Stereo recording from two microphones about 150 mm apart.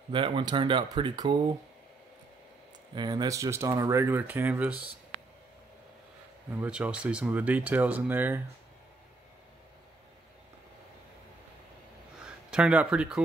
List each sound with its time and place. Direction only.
0.1 s speech: 35° right (ahead or behind)
2.9 s speech: 30° right (ahead or behind); by 4.8 s 10° right (ahead or behind)
6.5 s speech: 10° right (ahead or behind)
12.4 s speech: 5° right (ahead or behind)